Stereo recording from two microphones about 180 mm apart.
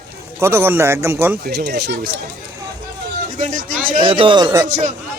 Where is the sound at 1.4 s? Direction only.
65° right (ahead or behind).